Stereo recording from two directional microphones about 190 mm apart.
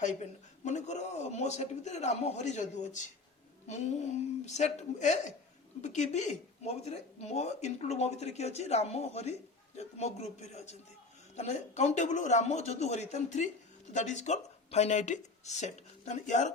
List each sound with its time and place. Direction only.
0.6 s a man's voice: 40° left (ahead or behind)